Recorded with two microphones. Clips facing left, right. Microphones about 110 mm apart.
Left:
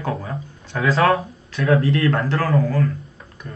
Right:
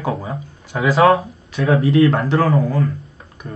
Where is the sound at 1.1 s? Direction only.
25° right (ahead or behind).